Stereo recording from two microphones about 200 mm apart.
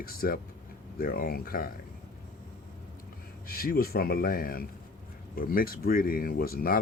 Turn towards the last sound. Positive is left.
turn(degrees=50)  # may be behind; listen again after turning